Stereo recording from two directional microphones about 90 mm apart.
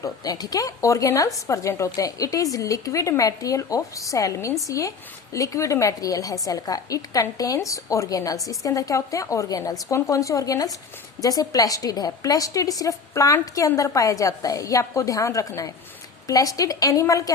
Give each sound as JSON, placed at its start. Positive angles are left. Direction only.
{"t": 0.0, "sound": "a woman's voice", "side_deg": 45}